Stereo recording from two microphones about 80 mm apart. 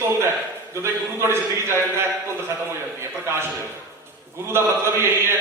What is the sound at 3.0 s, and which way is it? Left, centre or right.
A man's voice, right.